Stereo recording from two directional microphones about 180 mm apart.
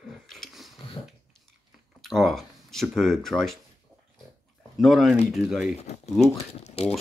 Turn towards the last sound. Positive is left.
turn(degrees=40)  # may be behind; listen again after turning